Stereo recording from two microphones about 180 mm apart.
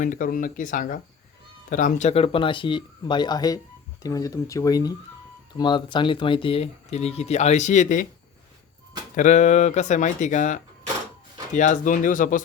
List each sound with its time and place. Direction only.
0.0 s speech: 45° left (ahead or behind)
9.1 s speech: 45° left (ahead or behind)